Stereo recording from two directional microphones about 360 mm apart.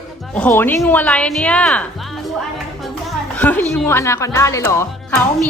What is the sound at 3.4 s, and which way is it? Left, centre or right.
Speech, centre.